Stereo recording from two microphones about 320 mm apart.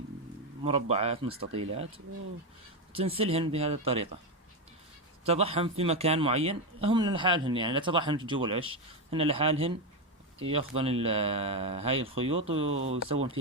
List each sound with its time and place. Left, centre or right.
0.6 s speech: centre
2.9 s speech: centre
5.2 s speech: centre